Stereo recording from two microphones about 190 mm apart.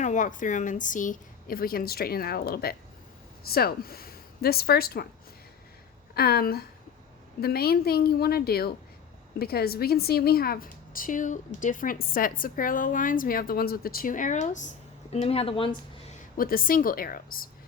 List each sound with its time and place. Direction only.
0.0 s a woman's voice: 40° left (ahead or behind)
6.1 s a woman's voice: 55° left (ahead or behind); by 15.8 s 25° left (ahead or behind)
16.4 s a woman's voice: 50° left (ahead or behind)